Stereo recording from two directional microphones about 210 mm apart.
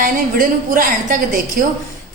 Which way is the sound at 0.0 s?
40° right (ahead or behind).